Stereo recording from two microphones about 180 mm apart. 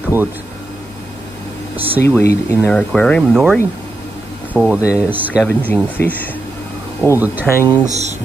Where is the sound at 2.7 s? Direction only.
5° left (ahead or behind).